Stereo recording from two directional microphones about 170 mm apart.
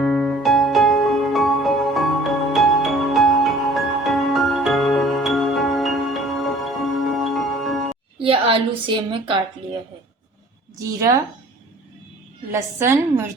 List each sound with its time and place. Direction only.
0.0 s music: centre (ahead or behind)
8.2 s a woman's voice: 30° right (ahead or behind)
12.5 s a woman's voice: 15° right (ahead or behind)